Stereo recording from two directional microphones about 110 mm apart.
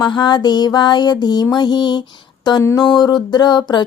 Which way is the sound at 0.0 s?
45° left (ahead or behind).